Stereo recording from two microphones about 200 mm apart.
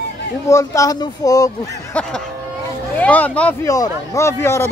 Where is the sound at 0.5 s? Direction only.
15° left (ahead or behind).